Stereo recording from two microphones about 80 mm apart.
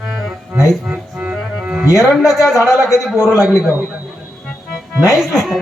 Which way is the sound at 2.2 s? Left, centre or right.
Centre.